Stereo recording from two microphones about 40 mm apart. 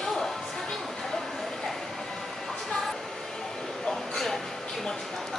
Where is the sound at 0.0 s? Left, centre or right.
Centre.